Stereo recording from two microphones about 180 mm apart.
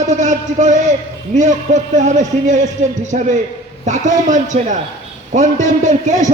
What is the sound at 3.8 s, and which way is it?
A man's voice, 40° right (ahead or behind).